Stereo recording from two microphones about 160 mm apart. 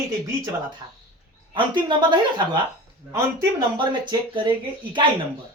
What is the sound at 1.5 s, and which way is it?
Speech, 30° right (ahead or behind).